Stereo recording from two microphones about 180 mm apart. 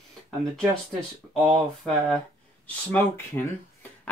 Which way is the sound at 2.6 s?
10° left (ahead or behind).